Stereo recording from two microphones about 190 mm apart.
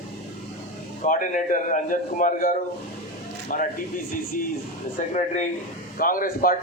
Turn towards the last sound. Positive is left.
turn(degrees=50)  # may be behind; listen again after turning